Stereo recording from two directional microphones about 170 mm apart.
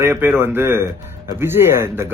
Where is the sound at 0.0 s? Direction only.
15° right (ahead or behind).